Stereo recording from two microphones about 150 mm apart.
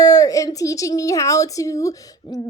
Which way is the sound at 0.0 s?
25° left (ahead or behind).